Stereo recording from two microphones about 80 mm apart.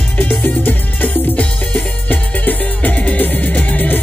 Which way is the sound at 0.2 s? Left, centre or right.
Centre.